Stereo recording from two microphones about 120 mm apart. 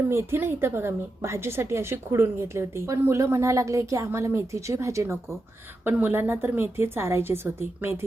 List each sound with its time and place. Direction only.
0.1 s a woman's voice: 20° right (ahead or behind)